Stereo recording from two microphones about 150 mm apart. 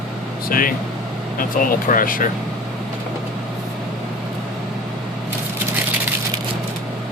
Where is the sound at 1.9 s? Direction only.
70° left (ahead or behind).